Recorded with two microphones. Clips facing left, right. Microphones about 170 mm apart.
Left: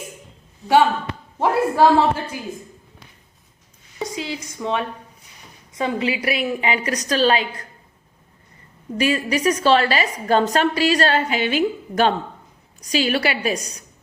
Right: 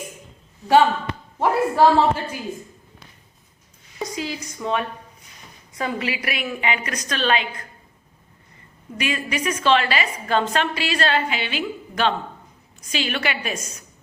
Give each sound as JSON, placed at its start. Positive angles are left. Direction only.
{"t": 1.4, "sound": "a woman's voice", "side_deg": 15}
{"t": 4.1, "sound": "a sound", "side_deg": 25}
{"t": 4.5, "sound": "a woman's voice", "side_deg": 15}
{"t": 5.7, "sound": "a woman's voice", "side_deg": 25}
{"t": 9.0, "sound": "a woman's voice", "side_deg": 40}